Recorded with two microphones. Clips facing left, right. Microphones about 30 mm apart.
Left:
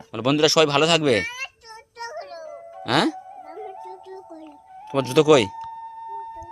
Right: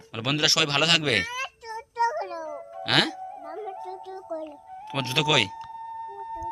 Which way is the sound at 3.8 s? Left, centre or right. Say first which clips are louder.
Right 1 dB; right.